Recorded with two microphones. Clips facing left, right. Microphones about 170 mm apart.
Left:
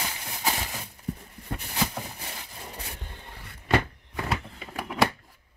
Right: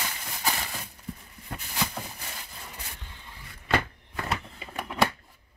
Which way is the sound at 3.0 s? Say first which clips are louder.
Left 4 dB; 50° left (ahead or behind).